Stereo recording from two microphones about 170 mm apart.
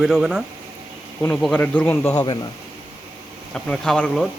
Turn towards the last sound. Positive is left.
turn(degrees=5)  # may be behind; listen again after turning